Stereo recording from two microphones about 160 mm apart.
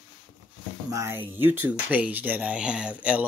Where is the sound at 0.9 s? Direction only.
15° right (ahead or behind).